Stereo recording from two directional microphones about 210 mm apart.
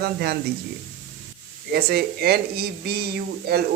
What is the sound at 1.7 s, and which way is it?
Speech, 50° right (ahead or behind).